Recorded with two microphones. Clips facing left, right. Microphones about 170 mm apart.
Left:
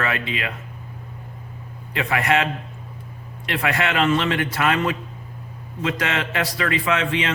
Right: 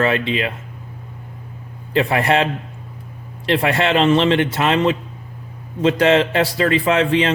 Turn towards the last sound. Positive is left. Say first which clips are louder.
# right 6 dB
turn(degrees=-30)  # may be behind; listen again after turning